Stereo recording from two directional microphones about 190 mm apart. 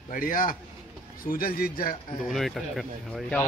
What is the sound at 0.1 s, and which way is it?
Speech, 45° left (ahead or behind).